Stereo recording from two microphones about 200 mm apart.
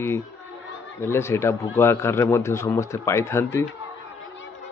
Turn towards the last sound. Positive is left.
turn(degrees=15)  # may be behind; listen again after turning